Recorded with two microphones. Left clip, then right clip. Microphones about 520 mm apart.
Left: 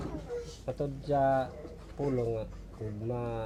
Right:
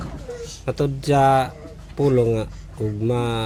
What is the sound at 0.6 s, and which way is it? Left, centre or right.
Speech, right.